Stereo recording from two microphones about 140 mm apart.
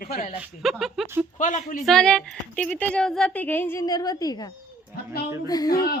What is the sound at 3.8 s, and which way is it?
A woman's voice, 25° left (ahead or behind).